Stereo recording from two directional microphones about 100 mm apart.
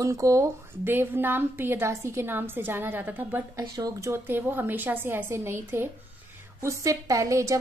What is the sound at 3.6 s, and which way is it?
Speech, 40° right (ahead or behind).